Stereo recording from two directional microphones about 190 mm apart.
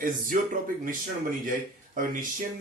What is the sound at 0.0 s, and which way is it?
Speech, 45° right (ahead or behind).